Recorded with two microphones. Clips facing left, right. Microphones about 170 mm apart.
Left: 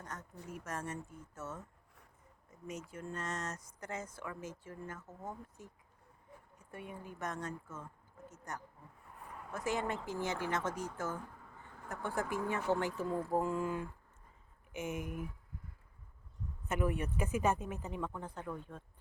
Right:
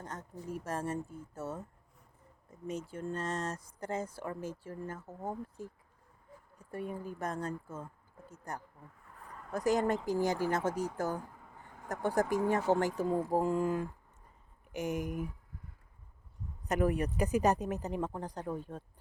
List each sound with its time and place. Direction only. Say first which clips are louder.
0.0 s a sound: right 3 dB; 30° right (ahead or behind)
0.4 s speech: right 6 dB; 30° right (ahead or behind)
14.7 s speech: right 5 dB; centre (ahead or behind)
14.9 s speech: right 5 dB; 40° right (ahead or behind)
16.6 s speech: right 5 dB; 40° right (ahead or behind)